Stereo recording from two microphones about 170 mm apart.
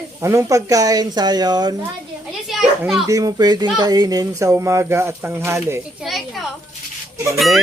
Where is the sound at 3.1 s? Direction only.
20° right (ahead or behind).